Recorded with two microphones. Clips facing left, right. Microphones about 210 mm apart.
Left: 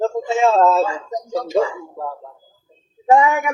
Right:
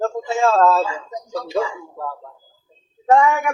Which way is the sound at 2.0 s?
25° left (ahead or behind).